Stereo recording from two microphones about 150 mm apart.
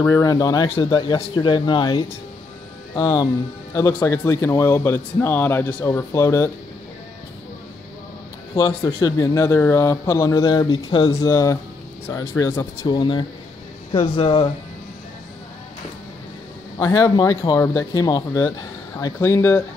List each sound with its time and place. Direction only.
0.0 s speech: 25° left (ahead or behind)
8.5 s speech: 25° left (ahead or behind)
12.8 s speech: 30° left (ahead or behind)
16.7 s speech: 20° left (ahead or behind)